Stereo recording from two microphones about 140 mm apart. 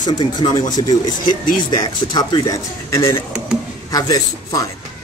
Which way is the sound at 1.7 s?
30° left (ahead or behind).